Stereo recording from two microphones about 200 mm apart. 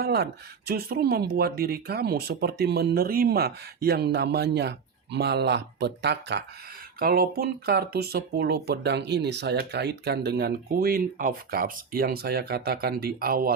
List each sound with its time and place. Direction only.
0.0 s speech: 55° right (ahead or behind)